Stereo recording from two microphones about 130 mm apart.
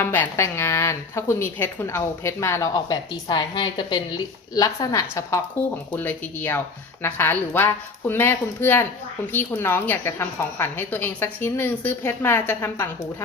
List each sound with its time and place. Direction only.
0.0 s a woman's voice: 15° left (ahead or behind)
6.0 s speech: 15° left (ahead or behind)